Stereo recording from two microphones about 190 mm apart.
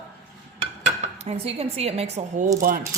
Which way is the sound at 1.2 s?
30° right (ahead or behind).